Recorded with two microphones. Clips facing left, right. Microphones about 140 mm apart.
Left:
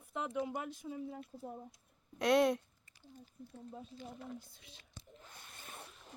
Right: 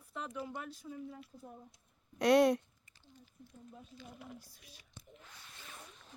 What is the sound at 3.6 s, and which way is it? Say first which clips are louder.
Speech: left 4 dB; 30° left (ahead or behind).